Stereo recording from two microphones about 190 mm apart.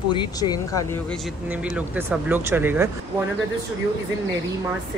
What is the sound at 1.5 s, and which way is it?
Speech, 5° right (ahead or behind).